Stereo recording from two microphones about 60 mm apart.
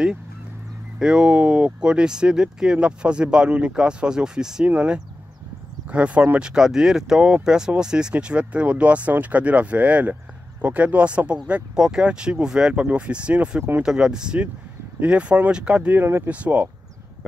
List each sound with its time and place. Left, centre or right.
0.9 s speech: centre
16.0 s speech: right
16.3 s speech: right